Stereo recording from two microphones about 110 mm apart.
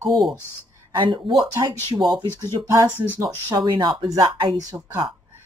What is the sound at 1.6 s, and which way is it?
Speech, 35° right (ahead or behind).